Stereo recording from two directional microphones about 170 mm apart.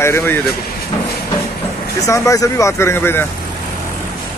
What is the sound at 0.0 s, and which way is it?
Speech, 15° left (ahead or behind).